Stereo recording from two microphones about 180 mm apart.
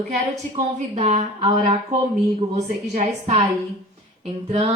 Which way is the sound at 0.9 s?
35° right (ahead or behind).